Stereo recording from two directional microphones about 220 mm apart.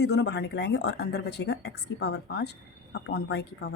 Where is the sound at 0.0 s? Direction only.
50° left (ahead or behind).